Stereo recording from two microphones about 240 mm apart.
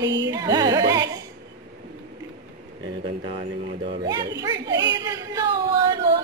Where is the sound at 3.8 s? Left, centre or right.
Centre.